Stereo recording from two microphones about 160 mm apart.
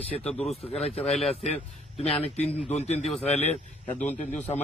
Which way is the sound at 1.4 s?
40° left (ahead or behind).